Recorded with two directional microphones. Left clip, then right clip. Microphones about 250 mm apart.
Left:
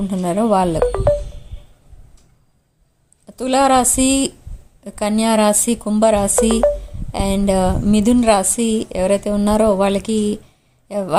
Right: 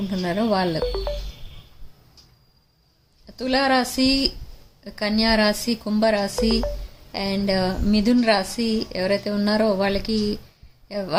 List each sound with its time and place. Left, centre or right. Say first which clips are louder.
0.1 s a woman's voice: left 6 dB; left
0.8 s speech: left 10 dB; centre
3.2 s a woman's voice: left 6 dB; left